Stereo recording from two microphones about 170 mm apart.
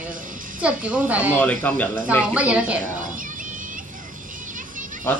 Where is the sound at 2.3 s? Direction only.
5° right (ahead or behind).